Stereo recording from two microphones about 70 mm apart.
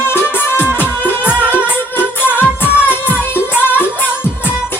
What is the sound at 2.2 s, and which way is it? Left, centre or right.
Music, left.